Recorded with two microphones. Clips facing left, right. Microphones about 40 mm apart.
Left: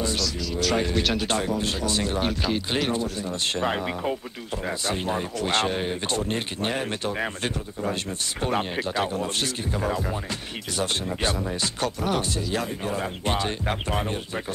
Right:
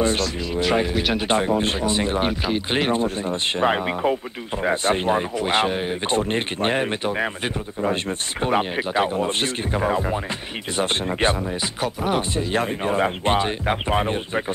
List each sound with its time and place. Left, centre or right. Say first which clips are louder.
0.0 s speech: right 6 dB; right
0.6 s speech: right 4 dB; right
0.8 s speech: right 3 dB; centre; by 3.3 s right
3.5 s speech: right 7 dB; right
5.3 s speech: right 4 dB; centre
6.0 s speech: right 5 dB; right
10.8 s speech: right 5 dB; right
11.6 s speech: right 1 dB; centre
12.4 s speech: right 5 dB; right